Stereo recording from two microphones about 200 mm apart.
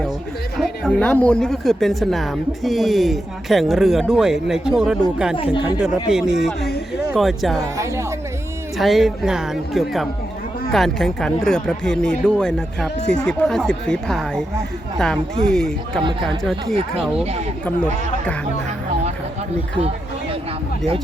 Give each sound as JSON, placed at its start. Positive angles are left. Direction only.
{"t": 0.6, "sound": "speech", "side_deg": 5}
{"t": 8.8, "sound": "speech", "side_deg": 0}
{"t": 16.0, "sound": "speech", "side_deg": -25}
{"t": 16.4, "sound": "speech", "side_deg": 0}